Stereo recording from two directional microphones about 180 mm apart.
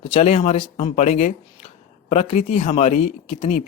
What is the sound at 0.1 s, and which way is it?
Speech, 35° left (ahead or behind).